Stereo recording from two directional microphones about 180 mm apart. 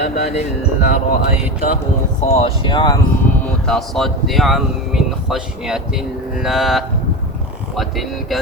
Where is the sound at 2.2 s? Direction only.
40° left (ahead or behind).